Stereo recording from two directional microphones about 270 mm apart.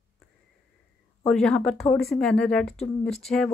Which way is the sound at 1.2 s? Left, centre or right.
Centre.